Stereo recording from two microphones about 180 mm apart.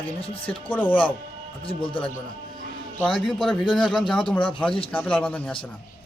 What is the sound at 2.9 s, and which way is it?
A man's voice, 5° left (ahead or behind).